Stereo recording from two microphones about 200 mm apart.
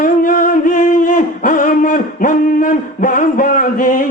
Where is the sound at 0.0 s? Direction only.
45° left (ahead or behind).